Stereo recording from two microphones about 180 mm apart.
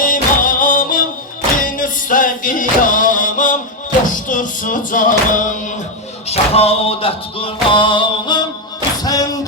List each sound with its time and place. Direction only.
0.0 s music: 50° left (ahead or behind)
6.2 s a sound: 35° left (ahead or behind)
9.0 s music: 20° left (ahead or behind)